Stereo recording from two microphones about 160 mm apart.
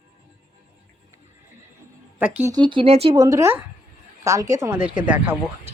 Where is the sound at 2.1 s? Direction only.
10° right (ahead or behind).